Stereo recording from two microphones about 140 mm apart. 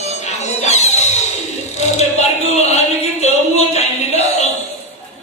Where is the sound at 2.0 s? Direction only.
50° left (ahead or behind).